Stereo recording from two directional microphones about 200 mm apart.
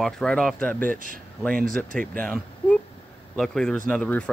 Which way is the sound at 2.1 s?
5° left (ahead or behind).